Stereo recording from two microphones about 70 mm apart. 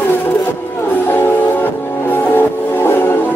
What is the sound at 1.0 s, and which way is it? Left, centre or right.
Music, left.